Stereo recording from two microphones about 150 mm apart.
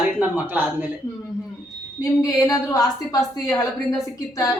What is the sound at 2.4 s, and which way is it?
A woman's voice, 25° left (ahead or behind).